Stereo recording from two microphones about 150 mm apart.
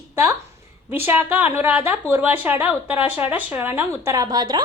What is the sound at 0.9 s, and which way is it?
A woman's voice, 15° right (ahead or behind).